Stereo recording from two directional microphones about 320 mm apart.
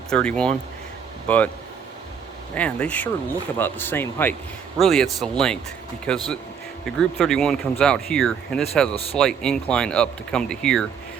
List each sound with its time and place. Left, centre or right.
0.1 s speech: centre
2.6 s speech: centre